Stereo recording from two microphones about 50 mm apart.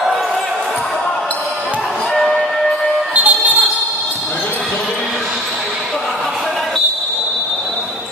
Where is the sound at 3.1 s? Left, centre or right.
Right.